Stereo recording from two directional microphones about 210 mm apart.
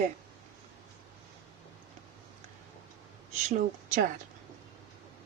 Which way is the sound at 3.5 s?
35° right (ahead or behind).